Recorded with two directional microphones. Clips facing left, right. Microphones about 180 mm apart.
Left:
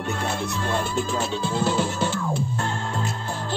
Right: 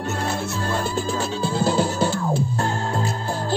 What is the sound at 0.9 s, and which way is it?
Music, 35° right (ahead or behind).